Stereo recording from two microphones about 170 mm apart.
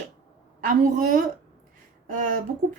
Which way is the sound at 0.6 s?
55° right (ahead or behind).